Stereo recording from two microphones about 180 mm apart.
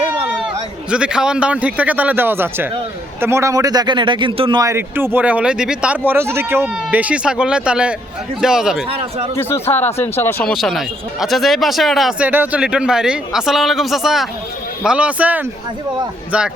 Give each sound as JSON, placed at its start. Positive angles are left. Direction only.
{"t": 0.9, "sound": "a man's voice", "side_deg": -5}
{"t": 8.9, "sound": "speech", "side_deg": -30}
{"t": 9.3, "sound": "speech", "side_deg": 15}
{"t": 10.5, "sound": "a man's voice", "side_deg": 0}